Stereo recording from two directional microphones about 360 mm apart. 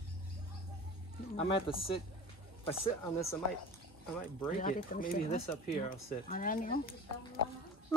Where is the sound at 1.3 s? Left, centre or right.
Centre.